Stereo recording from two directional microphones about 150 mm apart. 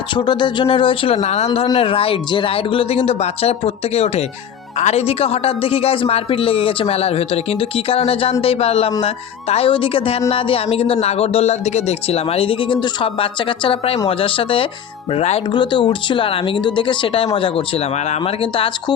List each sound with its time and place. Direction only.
0.1 s speech: 30° left (ahead or behind)
15.5 s speech: 30° left (ahead or behind)